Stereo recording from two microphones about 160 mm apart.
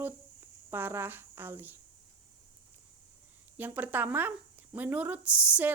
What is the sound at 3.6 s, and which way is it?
A woman's voice, 10° right (ahead or behind).